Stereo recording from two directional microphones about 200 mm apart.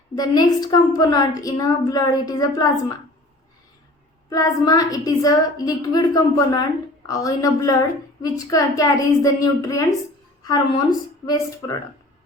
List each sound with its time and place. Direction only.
0.2 s a woman's voice: 20° left (ahead or behind)
4.3 s a woman's voice: 20° left (ahead or behind)
11.3 s a woman's voice: 15° left (ahead or behind)